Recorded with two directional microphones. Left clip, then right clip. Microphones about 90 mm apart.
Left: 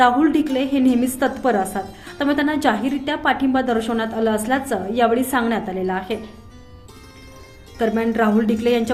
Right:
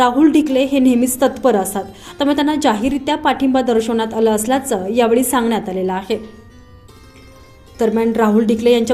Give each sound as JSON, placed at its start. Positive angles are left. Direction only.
{"t": 0.0, "sound": "a woman's voice", "side_deg": -30}
{"t": 7.9, "sound": "a woman's voice", "side_deg": -35}